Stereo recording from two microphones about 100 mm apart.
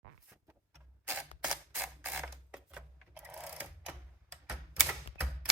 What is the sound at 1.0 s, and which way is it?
Camera, 15° right (ahead or behind).